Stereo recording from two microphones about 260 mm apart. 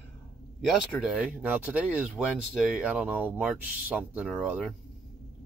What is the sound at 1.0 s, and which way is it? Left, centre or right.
Speech, centre.